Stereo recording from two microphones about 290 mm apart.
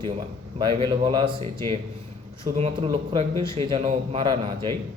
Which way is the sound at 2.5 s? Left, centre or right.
Centre.